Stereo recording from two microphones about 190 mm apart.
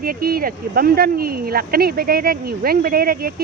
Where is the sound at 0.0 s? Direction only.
50° right (ahead or behind).